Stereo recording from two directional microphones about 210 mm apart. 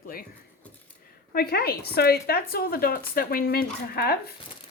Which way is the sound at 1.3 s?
45° left (ahead or behind).